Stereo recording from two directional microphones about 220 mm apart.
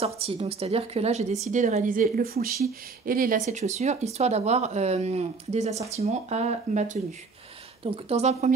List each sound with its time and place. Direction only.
0.0 s speech: 25° right (ahead or behind)